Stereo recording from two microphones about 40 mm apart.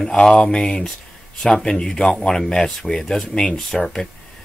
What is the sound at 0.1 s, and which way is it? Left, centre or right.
Speech, left.